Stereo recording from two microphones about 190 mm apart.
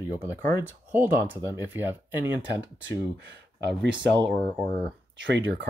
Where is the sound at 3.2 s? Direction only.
65° right (ahead or behind).